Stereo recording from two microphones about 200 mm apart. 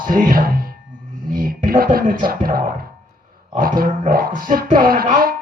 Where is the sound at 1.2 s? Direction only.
45° right (ahead or behind).